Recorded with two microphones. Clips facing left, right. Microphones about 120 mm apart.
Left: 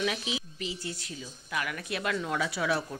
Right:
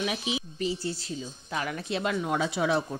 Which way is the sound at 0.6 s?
35° right (ahead or behind).